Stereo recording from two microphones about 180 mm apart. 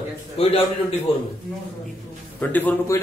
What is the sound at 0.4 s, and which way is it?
Speech, 35° left (ahead or behind).